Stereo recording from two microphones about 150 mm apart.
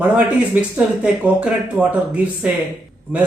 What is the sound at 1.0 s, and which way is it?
Speech, 10° right (ahead or behind).